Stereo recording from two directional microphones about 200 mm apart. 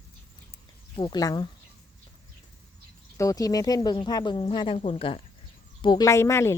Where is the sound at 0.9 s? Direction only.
25° left (ahead or behind).